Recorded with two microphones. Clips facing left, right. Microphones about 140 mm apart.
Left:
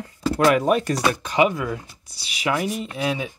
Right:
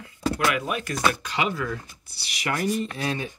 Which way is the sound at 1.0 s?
15° left (ahead or behind).